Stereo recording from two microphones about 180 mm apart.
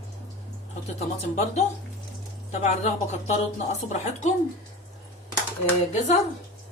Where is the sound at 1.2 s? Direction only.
35° left (ahead or behind).